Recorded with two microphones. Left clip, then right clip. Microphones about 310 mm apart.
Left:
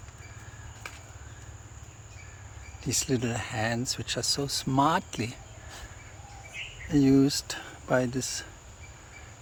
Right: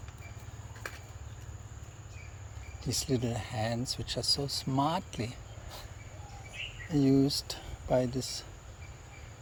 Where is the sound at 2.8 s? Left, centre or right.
Centre.